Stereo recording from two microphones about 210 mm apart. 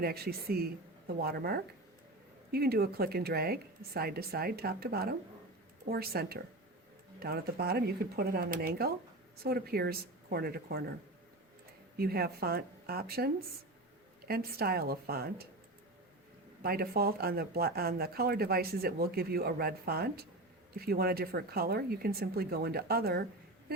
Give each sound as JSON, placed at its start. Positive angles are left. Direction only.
{"t": 0.0, "sound": "speech", "side_deg": -45}
{"t": 11.9, "sound": "speech", "side_deg": -45}
{"t": 16.6, "sound": "speech", "side_deg": -45}